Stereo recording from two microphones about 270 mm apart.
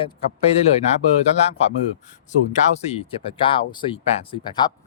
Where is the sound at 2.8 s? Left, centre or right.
Left.